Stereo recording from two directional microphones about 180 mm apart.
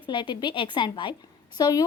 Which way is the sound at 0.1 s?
25° left (ahead or behind).